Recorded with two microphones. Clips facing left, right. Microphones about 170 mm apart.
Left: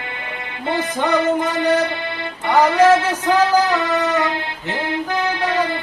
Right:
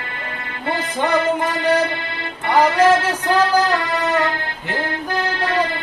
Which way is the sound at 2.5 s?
10° left (ahead or behind).